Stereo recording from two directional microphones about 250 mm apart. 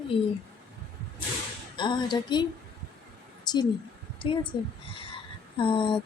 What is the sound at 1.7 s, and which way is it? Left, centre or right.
Speech, centre.